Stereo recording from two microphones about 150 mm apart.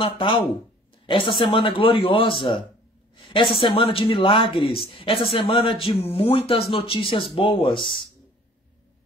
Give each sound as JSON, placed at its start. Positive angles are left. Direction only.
{"t": 0.0, "sound": "a woman's voice", "side_deg": 35}